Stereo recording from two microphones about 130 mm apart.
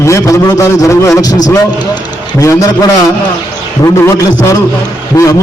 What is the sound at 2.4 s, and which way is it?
Speech, 25° left (ahead or behind).